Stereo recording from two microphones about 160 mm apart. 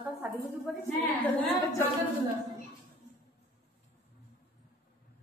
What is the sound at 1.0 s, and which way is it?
Speech, 10° left (ahead or behind).